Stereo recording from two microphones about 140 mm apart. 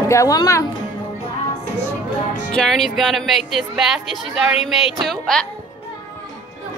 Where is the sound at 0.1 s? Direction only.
25° left (ahead or behind).